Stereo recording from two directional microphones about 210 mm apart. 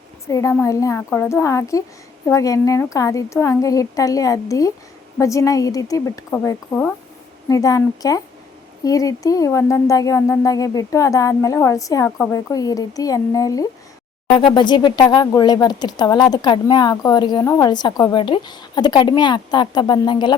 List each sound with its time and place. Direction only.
0.3 s a woman's voice: 15° left (ahead or behind)